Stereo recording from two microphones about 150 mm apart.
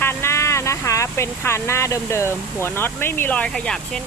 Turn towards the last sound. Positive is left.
turn(degrees=5)  # may be behind; listen again after turning